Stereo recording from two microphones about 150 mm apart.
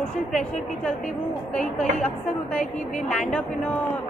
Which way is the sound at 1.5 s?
5° left (ahead or behind).